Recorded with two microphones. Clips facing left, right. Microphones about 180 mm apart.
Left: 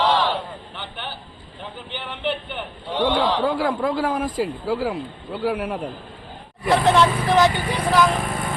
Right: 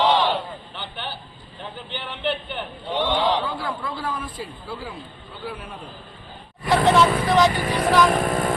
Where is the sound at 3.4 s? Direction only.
90° left.